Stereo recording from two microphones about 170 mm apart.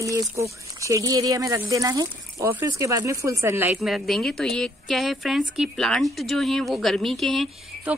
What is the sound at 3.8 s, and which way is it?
A woman's voice, centre (ahead or behind).